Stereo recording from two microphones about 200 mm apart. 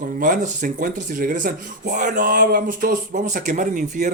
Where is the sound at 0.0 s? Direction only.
40° right (ahead or behind).